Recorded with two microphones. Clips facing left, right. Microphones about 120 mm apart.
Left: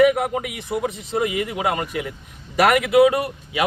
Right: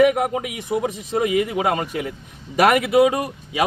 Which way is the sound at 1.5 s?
25° right (ahead or behind).